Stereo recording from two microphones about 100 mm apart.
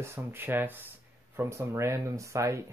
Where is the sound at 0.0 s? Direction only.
25° right (ahead or behind).